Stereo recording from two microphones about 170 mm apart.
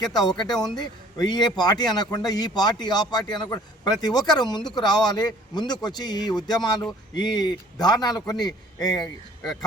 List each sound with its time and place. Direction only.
0.2 s a man's voice: 25° left (ahead or behind)
9.0 s speech: 5° left (ahead or behind)